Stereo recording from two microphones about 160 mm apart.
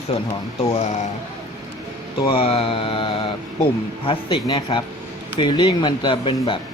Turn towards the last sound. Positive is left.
turn(degrees=30)  # may be behind; listen again after turning